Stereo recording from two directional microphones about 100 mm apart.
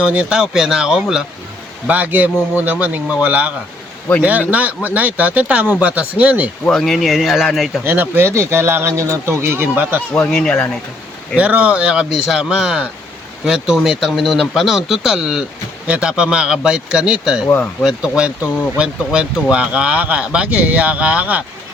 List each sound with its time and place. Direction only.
0.0 s speech: 10° right (ahead or behind)
1.9 s speech: 15° right (ahead or behind)
6.7 s speech: 5° left (ahead or behind)
7.9 s speech: 20° right (ahead or behind)
10.2 s speech: 10° left (ahead or behind)
11.3 s speech: 15° right (ahead or behind)